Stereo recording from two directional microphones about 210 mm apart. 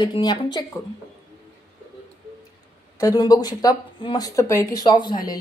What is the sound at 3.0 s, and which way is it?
Speech, 15° left (ahead or behind).